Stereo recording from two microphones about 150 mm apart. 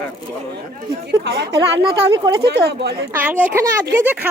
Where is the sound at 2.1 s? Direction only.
25° right (ahead or behind).